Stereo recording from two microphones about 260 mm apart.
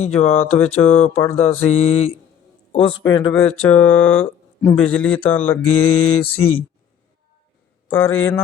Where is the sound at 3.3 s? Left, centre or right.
Centre.